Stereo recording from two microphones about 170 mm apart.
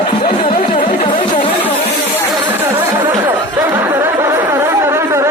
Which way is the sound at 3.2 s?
15° right (ahead or behind).